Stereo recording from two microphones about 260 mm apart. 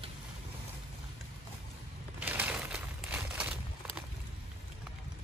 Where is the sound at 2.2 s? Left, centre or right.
Centre.